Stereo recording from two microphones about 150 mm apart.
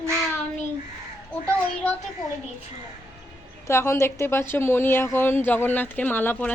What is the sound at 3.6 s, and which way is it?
Speech, 15° left (ahead or behind).